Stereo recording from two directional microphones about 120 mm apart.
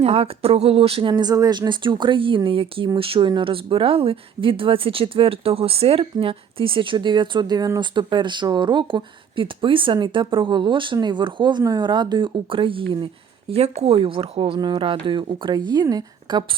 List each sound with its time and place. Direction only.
0.0 s speech: 55° right (ahead or behind)
13.5 s speech: 60° right (ahead or behind); by 16.4 s 35° right (ahead or behind)